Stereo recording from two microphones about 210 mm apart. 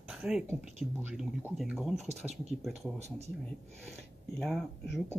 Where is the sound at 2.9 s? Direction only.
30° right (ahead or behind).